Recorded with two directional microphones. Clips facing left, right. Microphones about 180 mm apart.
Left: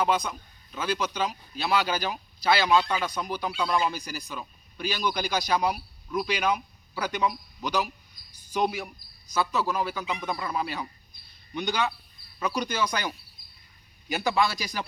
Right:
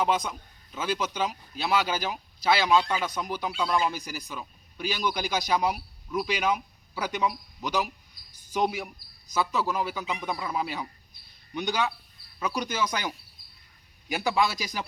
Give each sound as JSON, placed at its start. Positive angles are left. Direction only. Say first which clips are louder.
{"t": 0.9, "sound": "speech", "louder": "even", "side_deg": -15}
{"t": 2.6, "sound": "speech", "louder": "even", "side_deg": 0}
{"t": 3.0, "sound": "speech", "louder": "even", "side_deg": -15}